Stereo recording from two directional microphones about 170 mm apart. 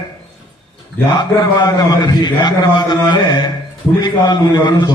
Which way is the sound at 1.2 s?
25° left (ahead or behind).